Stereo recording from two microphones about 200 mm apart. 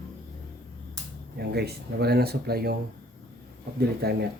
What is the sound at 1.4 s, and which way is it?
Speech, 55° right (ahead or behind).